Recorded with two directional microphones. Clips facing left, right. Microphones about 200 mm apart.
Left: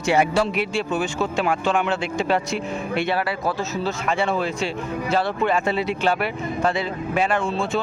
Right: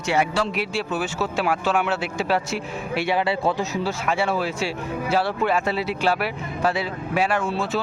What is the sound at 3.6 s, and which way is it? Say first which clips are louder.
Speech: even; 10° right (ahead or behind).